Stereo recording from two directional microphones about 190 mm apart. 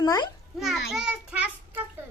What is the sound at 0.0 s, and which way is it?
Speech, 20° left (ahead or behind).